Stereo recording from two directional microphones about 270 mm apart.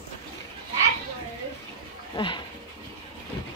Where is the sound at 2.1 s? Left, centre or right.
Centre.